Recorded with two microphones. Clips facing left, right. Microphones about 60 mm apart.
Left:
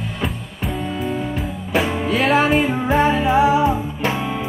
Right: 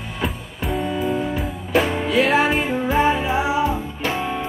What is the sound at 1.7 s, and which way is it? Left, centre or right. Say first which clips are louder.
Music: right 1 dB; centre.